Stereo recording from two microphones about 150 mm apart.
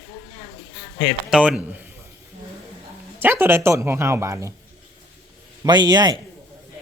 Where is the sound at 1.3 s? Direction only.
5° right (ahead or behind).